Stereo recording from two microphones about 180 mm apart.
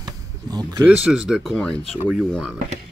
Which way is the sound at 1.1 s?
5° right (ahead or behind).